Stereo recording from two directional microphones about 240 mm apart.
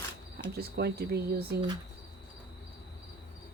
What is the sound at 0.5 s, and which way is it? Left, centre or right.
Speech, right.